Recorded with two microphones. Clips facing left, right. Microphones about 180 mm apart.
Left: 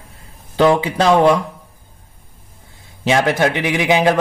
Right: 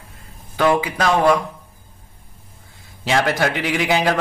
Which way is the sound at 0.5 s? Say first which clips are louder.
Left 4 dB; 25° left (ahead or behind).